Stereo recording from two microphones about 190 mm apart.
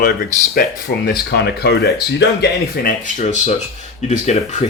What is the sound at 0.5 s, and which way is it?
Speech, 55° left (ahead or behind).